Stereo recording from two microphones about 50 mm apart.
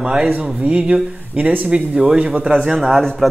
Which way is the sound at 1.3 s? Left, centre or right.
Right.